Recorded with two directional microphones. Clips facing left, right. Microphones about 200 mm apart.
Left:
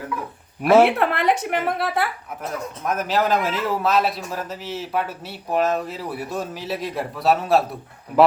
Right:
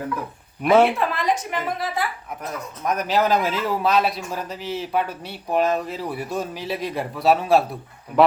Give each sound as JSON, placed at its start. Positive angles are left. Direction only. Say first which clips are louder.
{"t": 0.6, "sound": "speech", "louder": "left 2 dB", "side_deg": 5}
{"t": 0.9, "sound": "speech", "louder": "left 3 dB", "side_deg": 65}
{"t": 2.8, "sound": "a man's voice", "louder": "right 1 dB", "side_deg": 0}